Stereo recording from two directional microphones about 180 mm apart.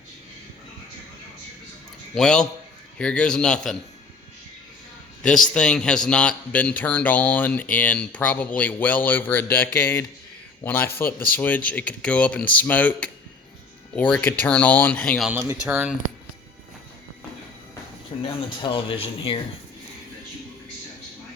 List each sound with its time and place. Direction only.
2.1 s a man's voice: 5° left (ahead or behind)
5.5 s a man's voice: 5° left (ahead or behind)
15.3 s a man's voice: 10° right (ahead or behind)
18.2 s speech: 30° left (ahead or behind)